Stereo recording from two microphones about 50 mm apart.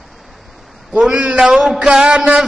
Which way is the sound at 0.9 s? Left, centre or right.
Centre.